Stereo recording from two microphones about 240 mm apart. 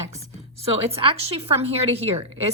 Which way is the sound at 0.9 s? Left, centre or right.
Right.